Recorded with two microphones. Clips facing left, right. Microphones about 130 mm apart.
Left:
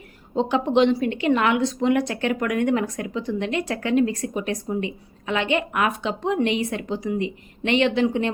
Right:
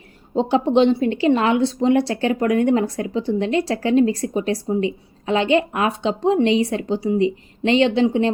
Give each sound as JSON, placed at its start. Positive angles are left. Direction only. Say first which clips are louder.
{"t": 0.3, "sound": "a woman's voice", "louder": "right 3 dB", "side_deg": -30}